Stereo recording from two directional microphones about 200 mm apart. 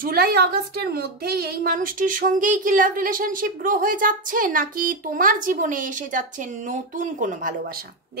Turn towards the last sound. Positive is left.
turn(degrees=-45)  # may be behind; listen again after turning